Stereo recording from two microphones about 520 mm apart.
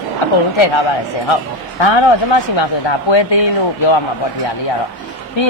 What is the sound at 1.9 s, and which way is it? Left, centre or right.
Speech, left.